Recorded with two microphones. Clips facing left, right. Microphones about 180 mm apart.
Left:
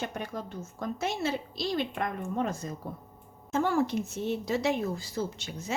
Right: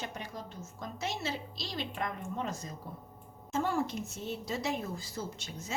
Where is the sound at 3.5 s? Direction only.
65° left (ahead or behind).